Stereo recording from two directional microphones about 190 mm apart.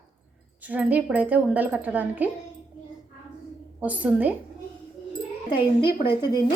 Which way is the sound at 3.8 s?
10° right (ahead or behind).